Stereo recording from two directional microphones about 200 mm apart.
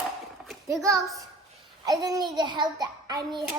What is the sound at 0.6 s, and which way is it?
A child's voice, 15° right (ahead or behind).